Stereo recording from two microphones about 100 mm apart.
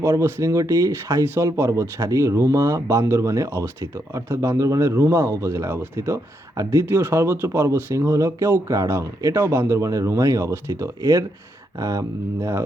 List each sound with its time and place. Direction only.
0.0 s speech: 25° right (ahead or behind)